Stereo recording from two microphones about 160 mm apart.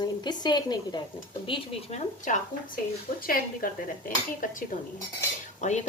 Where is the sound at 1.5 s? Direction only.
35° left (ahead or behind).